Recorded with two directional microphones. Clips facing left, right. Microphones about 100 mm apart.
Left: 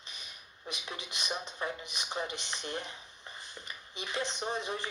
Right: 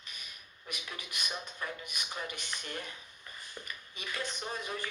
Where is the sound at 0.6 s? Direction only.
25° left (ahead or behind).